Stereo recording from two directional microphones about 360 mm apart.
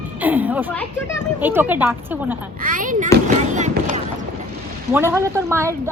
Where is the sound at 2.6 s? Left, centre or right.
Right.